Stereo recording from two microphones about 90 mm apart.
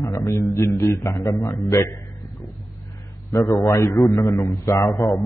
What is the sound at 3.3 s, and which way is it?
A man's voice, 35° left (ahead or behind).